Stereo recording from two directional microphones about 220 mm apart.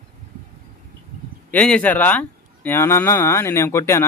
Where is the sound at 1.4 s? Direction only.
5° left (ahead or behind).